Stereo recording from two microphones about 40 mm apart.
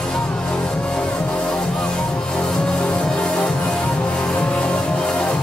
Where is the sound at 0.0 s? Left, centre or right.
Centre.